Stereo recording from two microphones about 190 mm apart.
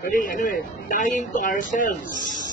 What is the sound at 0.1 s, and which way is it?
A man's voice, 45° left (ahead or behind).